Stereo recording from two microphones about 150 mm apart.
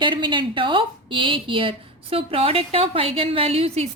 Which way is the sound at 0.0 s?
35° right (ahead or behind).